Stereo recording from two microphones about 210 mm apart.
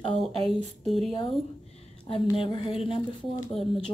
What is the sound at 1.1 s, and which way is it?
Speech, 25° left (ahead or behind).